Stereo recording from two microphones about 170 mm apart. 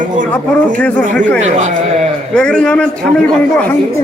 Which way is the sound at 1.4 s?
45° right (ahead or behind).